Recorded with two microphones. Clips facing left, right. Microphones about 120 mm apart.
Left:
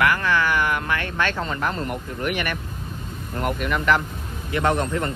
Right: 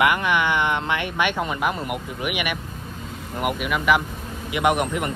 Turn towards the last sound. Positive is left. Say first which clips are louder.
# right 1 dB
turn(degrees=-15)  # may be behind; listen again after turning